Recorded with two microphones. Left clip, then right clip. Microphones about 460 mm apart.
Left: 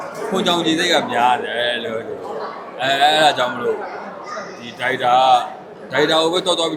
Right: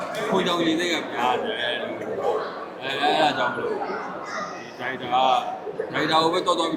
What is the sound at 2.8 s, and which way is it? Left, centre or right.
Speech, left.